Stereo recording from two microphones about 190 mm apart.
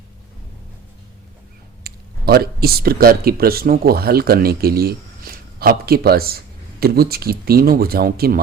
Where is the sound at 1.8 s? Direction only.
55° right (ahead or behind).